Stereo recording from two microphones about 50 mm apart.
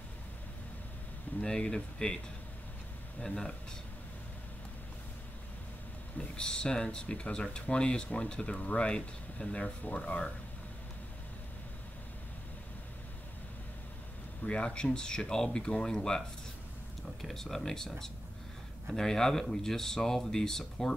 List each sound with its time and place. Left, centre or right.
1.4 s speech: centre
3.2 s speech: centre
6.1 s speech: centre
14.4 s speech: centre